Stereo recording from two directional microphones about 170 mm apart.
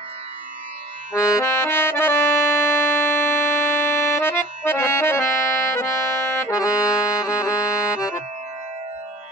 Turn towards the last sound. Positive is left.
turn(degrees=20)  # may be behind; listen again after turning